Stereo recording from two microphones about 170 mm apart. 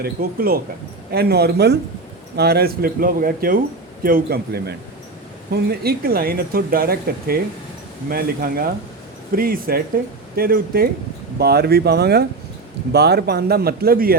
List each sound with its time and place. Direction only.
0.0 s speech: 60° right (ahead or behind)